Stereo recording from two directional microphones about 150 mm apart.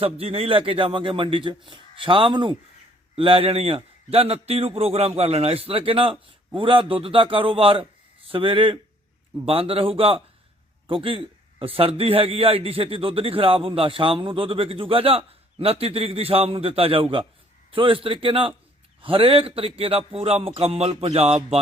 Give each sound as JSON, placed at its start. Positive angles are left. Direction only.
{"t": 0.0, "sound": "a man's voice", "side_deg": -40}